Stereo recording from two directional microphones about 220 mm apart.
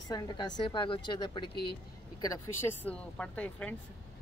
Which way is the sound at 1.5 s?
45° left (ahead or behind).